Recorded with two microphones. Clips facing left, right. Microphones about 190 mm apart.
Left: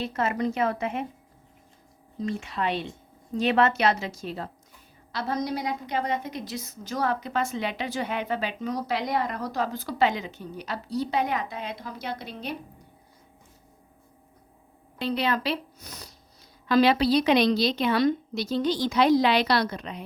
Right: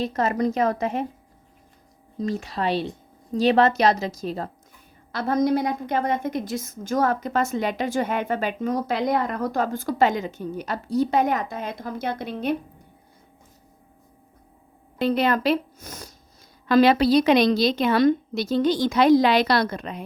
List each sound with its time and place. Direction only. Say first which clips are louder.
0.0 s a woman's voice: right 4 dB; 40° right (ahead or behind)
2.1 s a woman's voice: right 3 dB; 40° right (ahead or behind)
5.1 s a woman's voice: right 8 dB; 50° right (ahead or behind)
14.9 s a woman's voice: right 5 dB; 50° right (ahead or behind)